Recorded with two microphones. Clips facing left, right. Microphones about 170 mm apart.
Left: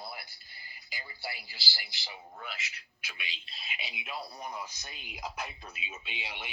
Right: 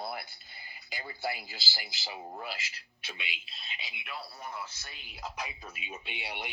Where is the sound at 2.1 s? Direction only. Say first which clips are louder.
Right 6 dB; 85° right.